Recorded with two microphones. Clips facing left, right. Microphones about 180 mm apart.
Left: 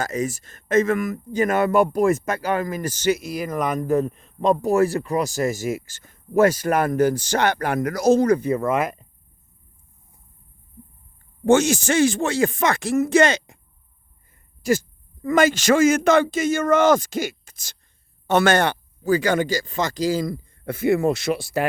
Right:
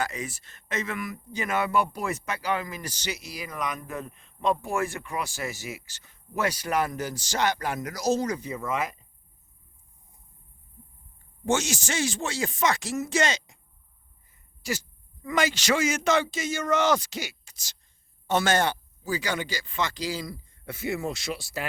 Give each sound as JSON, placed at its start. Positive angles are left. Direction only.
{"t": 0.0, "sound": "speech", "side_deg": 45}
{"t": 11.4, "sound": "speech", "side_deg": 55}
{"t": 14.6, "sound": "speech", "side_deg": 50}
{"t": 18.3, "sound": "speech", "side_deg": 65}